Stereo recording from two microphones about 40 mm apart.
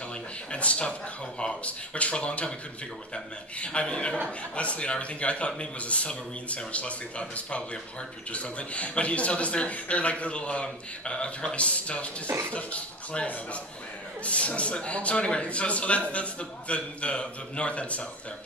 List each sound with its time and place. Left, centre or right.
0.5 s speech: left
3.5 s a man's voice: left
12.3 s speech: right
12.5 s speech: left